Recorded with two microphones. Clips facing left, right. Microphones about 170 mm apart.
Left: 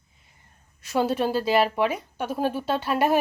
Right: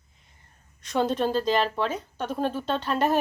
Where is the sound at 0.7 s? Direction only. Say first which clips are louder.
Left 1 dB; 5° left (ahead or behind).